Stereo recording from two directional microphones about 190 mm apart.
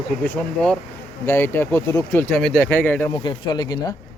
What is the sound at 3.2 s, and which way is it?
Speech, 25° left (ahead or behind).